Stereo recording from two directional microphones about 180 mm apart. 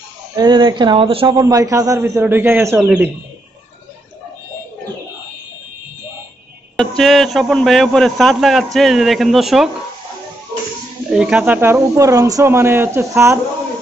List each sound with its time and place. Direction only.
0.4 s a man's voice: 25° right (ahead or behind)
7.0 s a man's voice: centre (ahead or behind)
11.1 s speech: 5° right (ahead or behind)